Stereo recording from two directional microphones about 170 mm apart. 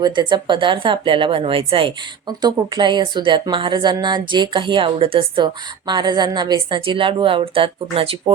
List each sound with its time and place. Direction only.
0.0 s a woman's voice: 25° right (ahead or behind)